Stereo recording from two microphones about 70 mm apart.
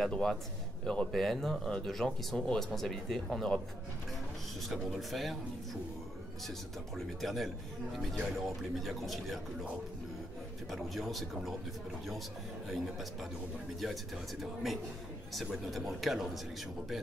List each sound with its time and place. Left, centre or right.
0.1 s a man's voice: centre
4.6 s speech: centre
7.2 s speech: centre
10.7 s speech: centre
12.6 s speech: centre
14.4 s speech: centre